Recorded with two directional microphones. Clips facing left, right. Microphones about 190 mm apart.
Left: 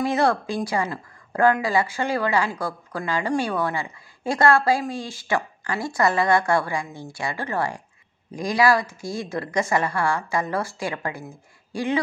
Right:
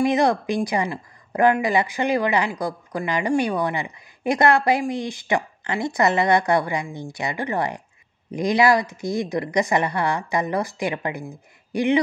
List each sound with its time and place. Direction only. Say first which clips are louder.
0.0 s a woman's voice: right 2 dB; 15° right (ahead or behind)